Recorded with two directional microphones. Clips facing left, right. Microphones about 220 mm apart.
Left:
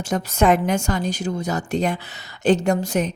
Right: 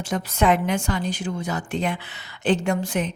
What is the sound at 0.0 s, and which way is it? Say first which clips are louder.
A woman's voice: left 3 dB; 45° left (ahead or behind).